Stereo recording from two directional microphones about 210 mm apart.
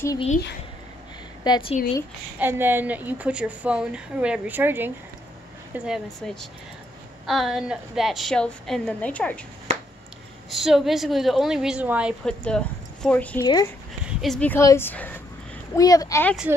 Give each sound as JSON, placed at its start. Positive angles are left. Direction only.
{"t": 1.4, "sound": "a woman's voice", "side_deg": 20}
{"t": 2.3, "sound": "a woman's voice", "side_deg": -10}
{"t": 9.7, "sound": "finger snapping", "side_deg": -30}
{"t": 10.5, "sound": "a woman's voice", "side_deg": 0}